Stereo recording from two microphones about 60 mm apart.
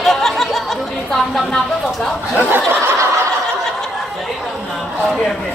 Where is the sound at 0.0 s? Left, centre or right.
Centre.